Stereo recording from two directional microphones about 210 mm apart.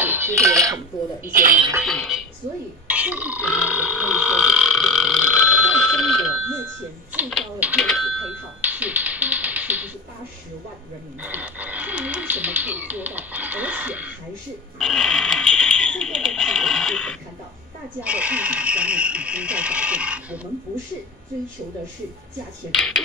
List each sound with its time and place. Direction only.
0.0 s speech: 10° right (ahead or behind)
1.3 s speech: 40° right (ahead or behind)
1.9 s a woman's voice: centre (ahead or behind)
2.9 s burping: 5° right (ahead or behind)
7.1 s telephone: 5° right (ahead or behind)
8.5 s music: 5° right (ahead or behind)
11.2 s a sound: 10° right (ahead or behind)
22.8 s a sound: centre (ahead or behind)